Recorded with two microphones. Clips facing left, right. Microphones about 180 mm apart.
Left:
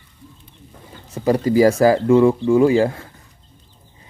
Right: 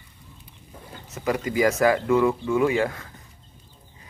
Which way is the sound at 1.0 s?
30° left (ahead or behind).